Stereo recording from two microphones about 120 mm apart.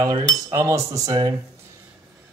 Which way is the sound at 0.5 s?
25° right (ahead or behind).